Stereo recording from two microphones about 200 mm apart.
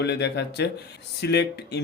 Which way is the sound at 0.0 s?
55° left (ahead or behind).